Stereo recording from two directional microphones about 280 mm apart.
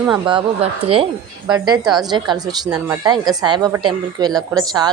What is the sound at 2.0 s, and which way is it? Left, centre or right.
Speech, centre.